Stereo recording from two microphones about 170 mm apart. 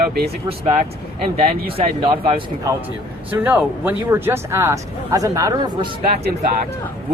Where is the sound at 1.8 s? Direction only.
30° right (ahead or behind).